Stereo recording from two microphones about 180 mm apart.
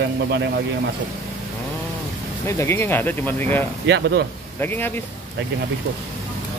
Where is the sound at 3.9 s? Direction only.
75° right (ahead or behind).